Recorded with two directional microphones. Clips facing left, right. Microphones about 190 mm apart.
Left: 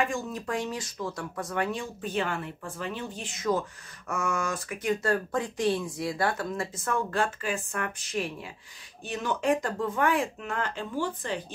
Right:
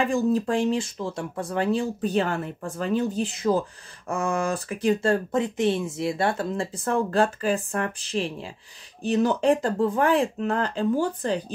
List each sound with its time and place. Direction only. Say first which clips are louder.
0.0 s speech: right 8 dB; 35° right (ahead or behind)